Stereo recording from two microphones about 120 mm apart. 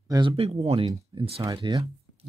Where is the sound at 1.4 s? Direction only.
35° right (ahead or behind).